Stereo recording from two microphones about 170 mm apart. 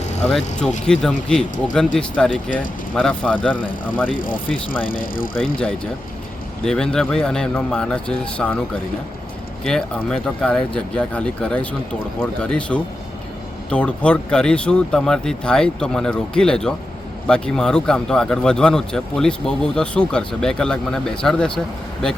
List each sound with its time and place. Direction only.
0.3 s speech: centre (ahead or behind)
4.9 s speech: 55° left (ahead or behind)
5.5 s speech: 5° left (ahead or behind)
9.6 s speech: 5° left (ahead or behind)